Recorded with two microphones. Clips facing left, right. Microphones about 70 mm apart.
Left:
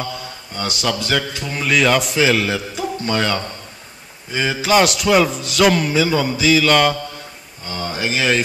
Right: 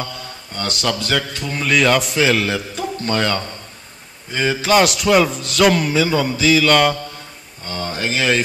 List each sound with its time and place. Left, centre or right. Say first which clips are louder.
0.0 s a man's voice: left 2 dB; centre